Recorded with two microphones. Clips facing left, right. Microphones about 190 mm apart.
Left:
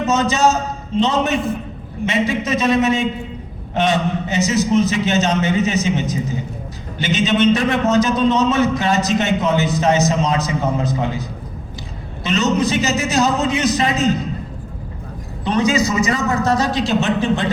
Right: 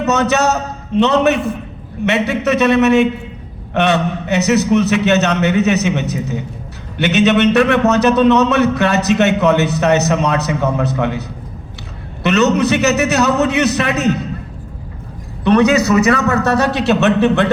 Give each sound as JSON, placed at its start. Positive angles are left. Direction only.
{"t": 0.0, "sound": "a man's voice", "side_deg": -65}
{"t": 12.2, "sound": "a man's voice", "side_deg": -65}
{"t": 15.4, "sound": "a man's voice", "side_deg": -65}